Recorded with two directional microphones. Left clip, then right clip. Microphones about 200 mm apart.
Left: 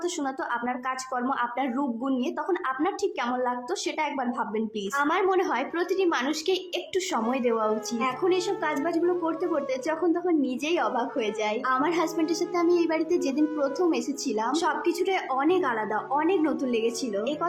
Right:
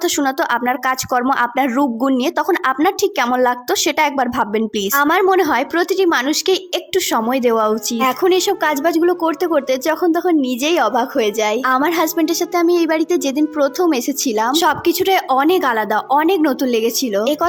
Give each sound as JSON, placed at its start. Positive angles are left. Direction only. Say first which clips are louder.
{"t": 0.0, "sound": "speech", "louder": "right 13 dB", "side_deg": -45}